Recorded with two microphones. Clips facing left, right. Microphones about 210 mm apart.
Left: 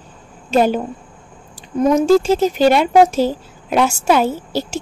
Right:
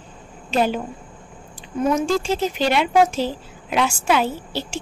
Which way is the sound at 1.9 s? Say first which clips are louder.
Left 8 dB; 40° left (ahead or behind).